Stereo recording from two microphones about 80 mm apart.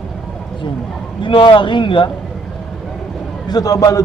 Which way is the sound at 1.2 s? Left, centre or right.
Left.